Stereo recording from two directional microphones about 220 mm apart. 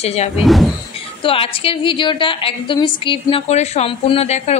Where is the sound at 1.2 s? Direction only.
25° left (ahead or behind).